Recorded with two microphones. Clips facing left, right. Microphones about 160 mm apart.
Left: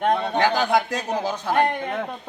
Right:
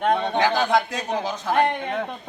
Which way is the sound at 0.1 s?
Centre (ahead or behind).